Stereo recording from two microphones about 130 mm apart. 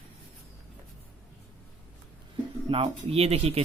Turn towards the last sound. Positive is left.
turn(degrees=-50)  # may be behind; listen again after turning